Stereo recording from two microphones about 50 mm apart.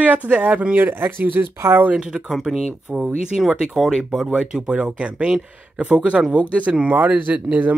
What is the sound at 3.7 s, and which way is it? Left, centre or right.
Speech, centre.